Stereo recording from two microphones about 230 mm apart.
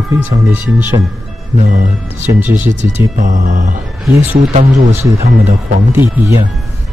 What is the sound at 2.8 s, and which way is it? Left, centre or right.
Speech, right.